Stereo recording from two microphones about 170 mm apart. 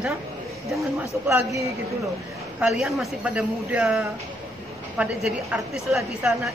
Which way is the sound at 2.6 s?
Centre (ahead or behind).